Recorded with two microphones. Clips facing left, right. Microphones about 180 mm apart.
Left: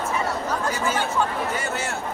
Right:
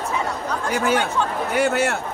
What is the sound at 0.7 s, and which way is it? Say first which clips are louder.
A man's voice: right 7 dB; 65° right (ahead or behind).